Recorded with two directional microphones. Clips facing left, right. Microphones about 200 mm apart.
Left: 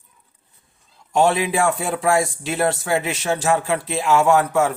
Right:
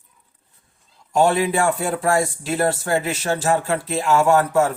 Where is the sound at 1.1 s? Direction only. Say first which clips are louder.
Even; centre (ahead or behind).